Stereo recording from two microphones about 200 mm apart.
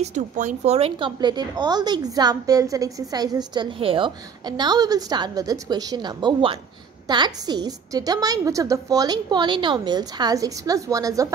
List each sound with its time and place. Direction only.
0.0 s a woman's voice: 35° right (ahead or behind); by 11.3 s 15° right (ahead or behind)